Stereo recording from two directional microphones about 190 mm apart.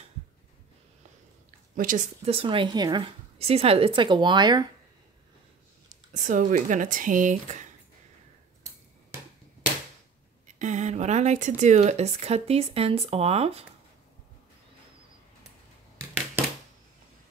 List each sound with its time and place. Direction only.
1.8 s a woman's voice: 45° right (ahead or behind); by 4.6 s 20° right (ahead or behind)
6.1 s speech: 40° right (ahead or behind)
10.4 s speech: 40° right (ahead or behind)